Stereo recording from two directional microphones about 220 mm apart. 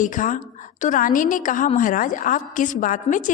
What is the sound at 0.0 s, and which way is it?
A woman's voice, 35° left (ahead or behind).